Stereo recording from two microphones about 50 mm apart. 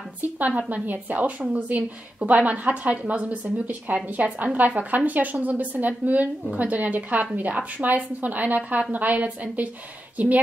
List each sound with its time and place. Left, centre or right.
0.4 s a woman's voice: right